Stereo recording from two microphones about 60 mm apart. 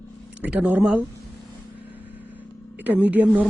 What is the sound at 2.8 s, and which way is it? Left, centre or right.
Speech, right.